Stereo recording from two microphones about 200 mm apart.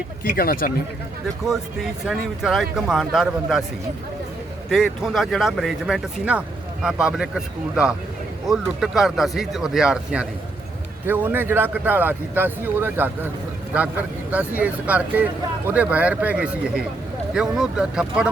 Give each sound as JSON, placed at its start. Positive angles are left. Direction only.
{"t": 0.3, "sound": "speech", "side_deg": 45}
{"t": 1.5, "sound": "speech", "side_deg": 0}
{"t": 4.7, "sound": "speech", "side_deg": 0}